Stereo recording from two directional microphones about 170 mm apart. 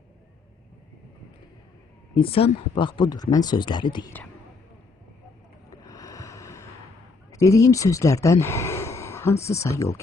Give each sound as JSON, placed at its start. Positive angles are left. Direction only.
{"t": 2.1, "sound": "speech", "side_deg": 35}
{"t": 5.9, "sound": "ocean", "side_deg": 20}
{"t": 7.3, "sound": "speech", "side_deg": 20}